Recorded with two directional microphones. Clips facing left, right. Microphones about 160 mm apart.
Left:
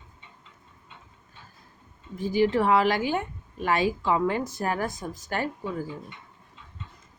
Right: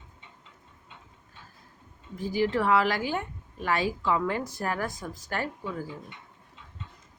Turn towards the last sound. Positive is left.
turn(degrees=20)  # may be behind; listen again after turning